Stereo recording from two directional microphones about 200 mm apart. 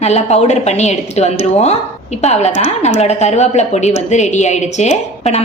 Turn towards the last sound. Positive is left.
turn(degrees=35)  # may be behind; listen again after turning